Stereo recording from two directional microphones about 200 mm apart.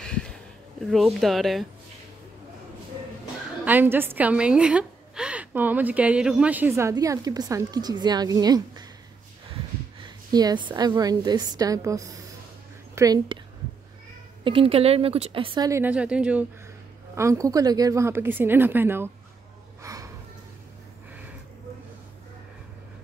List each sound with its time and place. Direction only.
0.0 s a sound: 5° left (ahead or behind)
0.8 s speech: centre (ahead or behind)
3.6 s a woman's voice: 10° right (ahead or behind)
10.0 s a woman's voice: 20° right (ahead or behind)
14.4 s a woman's voice: 25° right (ahead or behind); by 19.0 s 10° right (ahead or behind)
19.8 s a sound: 15° right (ahead or behind)